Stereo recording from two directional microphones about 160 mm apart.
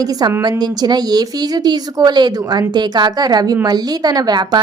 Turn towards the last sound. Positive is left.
turn(degrees=-25)  # may be behind; listen again after turning